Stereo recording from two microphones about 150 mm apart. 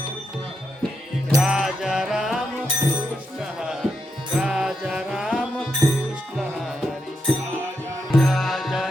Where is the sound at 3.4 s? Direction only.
5° right (ahead or behind).